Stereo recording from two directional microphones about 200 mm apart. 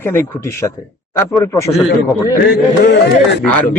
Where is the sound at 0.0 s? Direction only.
10° left (ahead or behind).